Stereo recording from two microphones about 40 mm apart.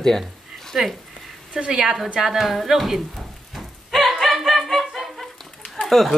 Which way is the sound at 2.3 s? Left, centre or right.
Centre.